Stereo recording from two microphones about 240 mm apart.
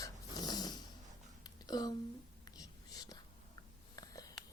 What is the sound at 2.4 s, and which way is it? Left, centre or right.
Whispering, centre.